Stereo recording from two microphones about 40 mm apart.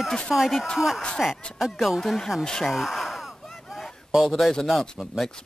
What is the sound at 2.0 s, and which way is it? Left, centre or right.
Speech, centre.